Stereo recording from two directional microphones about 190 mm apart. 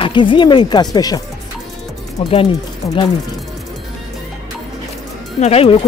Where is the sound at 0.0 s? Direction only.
25° left (ahead or behind).